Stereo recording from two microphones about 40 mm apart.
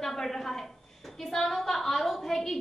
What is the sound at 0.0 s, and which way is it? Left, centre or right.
A woman's voice, centre.